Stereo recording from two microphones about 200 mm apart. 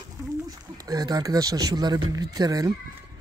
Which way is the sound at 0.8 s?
20° right (ahead or behind).